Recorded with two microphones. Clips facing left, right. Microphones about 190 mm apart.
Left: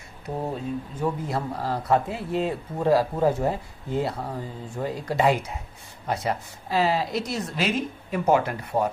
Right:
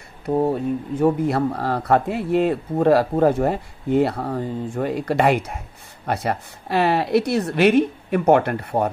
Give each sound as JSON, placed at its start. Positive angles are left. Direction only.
{"t": 0.9, "sound": "speech", "side_deg": -65}